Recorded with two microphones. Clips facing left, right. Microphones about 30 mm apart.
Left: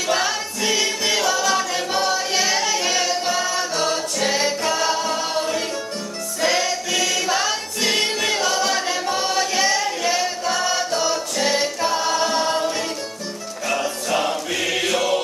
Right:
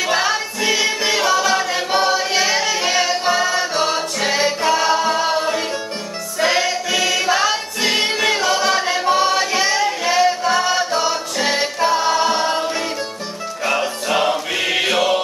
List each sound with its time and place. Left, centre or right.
0.0 s music: centre
13.7 s music: right